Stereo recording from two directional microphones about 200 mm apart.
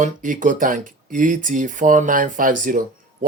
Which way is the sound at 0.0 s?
40° right (ahead or behind).